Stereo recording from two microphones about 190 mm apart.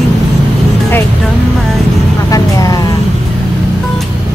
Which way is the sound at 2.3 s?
20° left (ahead or behind).